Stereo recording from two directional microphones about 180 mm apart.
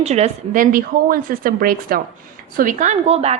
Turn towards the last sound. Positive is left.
turn(degrees=-35)  # may be behind; listen again after turning